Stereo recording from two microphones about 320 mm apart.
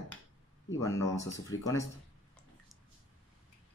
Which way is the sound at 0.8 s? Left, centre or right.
Centre.